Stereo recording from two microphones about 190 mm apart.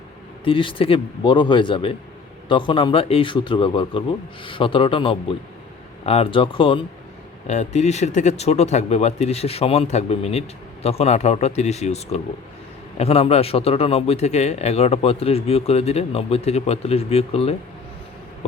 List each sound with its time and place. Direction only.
0.4 s a man's voice: 30° left (ahead or behind)
7.4 s speech: 35° left (ahead or behind)